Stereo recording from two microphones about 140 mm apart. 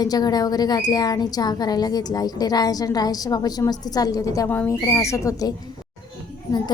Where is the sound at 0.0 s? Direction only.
30° left (ahead or behind).